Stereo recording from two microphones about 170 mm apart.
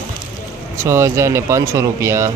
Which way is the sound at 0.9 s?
15° right (ahead or behind).